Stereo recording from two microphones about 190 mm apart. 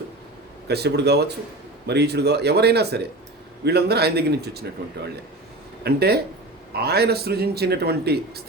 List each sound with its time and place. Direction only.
0.7 s a man's voice: 60° right (ahead or behind)
5.8 s a man's voice: 60° right (ahead or behind)